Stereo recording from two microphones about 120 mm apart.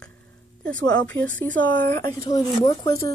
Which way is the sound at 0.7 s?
10° left (ahead or behind).